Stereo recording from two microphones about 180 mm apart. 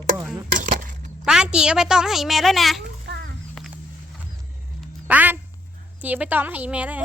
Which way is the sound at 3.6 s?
5° left (ahead or behind).